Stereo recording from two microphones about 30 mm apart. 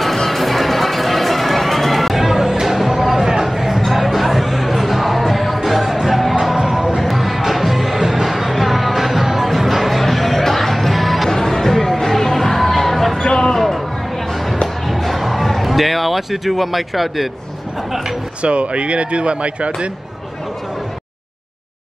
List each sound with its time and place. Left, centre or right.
0.3 s music: centre
2.6 s a sound: centre
3.8 s music: centre
6.5 s music: centre
7.0 s music: centre
11.2 s music: centre
13.2 s music: left
13.6 s music: centre
14.3 s a sound: centre
14.9 s music: centre
18.4 s speech: right